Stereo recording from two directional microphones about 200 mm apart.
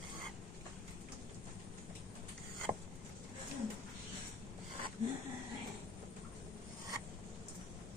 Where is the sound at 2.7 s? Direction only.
20° right (ahead or behind).